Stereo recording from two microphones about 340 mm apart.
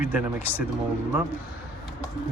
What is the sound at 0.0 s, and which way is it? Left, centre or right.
Speech, centre.